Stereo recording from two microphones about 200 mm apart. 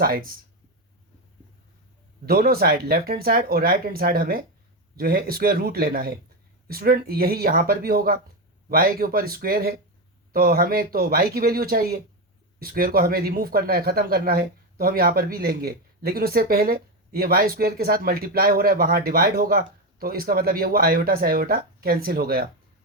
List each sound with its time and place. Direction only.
0.0 s speech: 45° right (ahead or behind)
2.2 s speech: 50° right (ahead or behind)